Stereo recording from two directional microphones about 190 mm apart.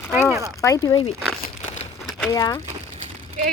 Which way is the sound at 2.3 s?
20° left (ahead or behind).